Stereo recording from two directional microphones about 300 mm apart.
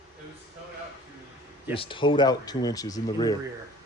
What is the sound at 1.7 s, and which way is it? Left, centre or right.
Speech, centre.